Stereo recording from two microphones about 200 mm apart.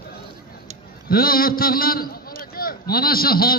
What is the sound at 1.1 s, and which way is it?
A man's voice, 45° left (ahead or behind).